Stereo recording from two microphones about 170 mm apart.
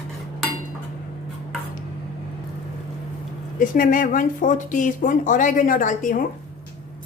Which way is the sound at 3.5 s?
50° left (ahead or behind).